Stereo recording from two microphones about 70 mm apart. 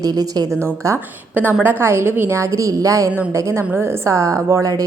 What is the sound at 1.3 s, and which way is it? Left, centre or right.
A woman's voice, right.